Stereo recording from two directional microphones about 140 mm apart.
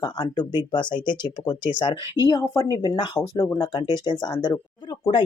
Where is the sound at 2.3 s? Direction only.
25° left (ahead or behind).